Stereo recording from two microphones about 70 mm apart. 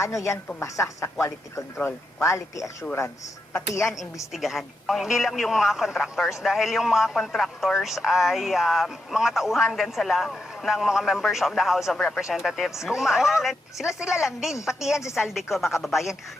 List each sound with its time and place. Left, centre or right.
0.0 s speech: left
2.2 s speech: left
4.3 s a man's voice: centre